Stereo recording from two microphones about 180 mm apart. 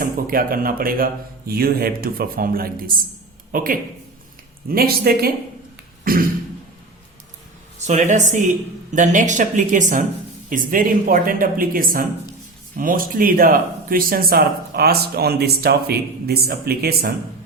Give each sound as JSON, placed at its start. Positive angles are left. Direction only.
{"t": 0.0, "sound": "speech", "side_deg": -50}
{"t": 7.9, "sound": "speech", "side_deg": -40}